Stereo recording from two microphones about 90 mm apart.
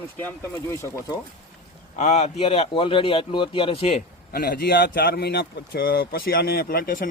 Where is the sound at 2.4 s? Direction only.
90° left.